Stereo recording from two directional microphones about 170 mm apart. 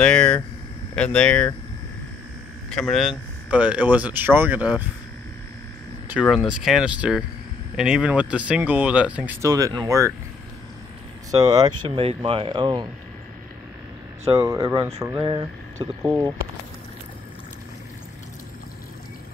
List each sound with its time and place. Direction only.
0.0 s a sound: 5° left (ahead or behind)
0.9 s speech: 5° left (ahead or behind)
2.7 s speech: centre (ahead or behind)
6.2 s speech: centre (ahead or behind)
9.5 s speech: 20° right (ahead or behind)
11.3 s speech: 25° right (ahead or behind)
14.4 s speech: 15° right (ahead or behind)
15.2 s speech: 25° right (ahead or behind)